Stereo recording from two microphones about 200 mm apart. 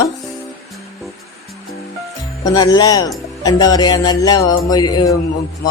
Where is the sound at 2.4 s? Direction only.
20° left (ahead or behind).